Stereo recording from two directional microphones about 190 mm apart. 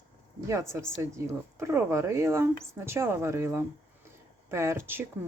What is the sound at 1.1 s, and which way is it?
Speech, 15° right (ahead or behind).